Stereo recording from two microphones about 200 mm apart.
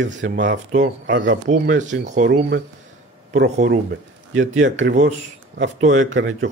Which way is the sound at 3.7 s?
65° right (ahead or behind).